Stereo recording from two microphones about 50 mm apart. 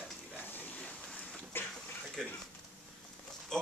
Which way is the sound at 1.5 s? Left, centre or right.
Left.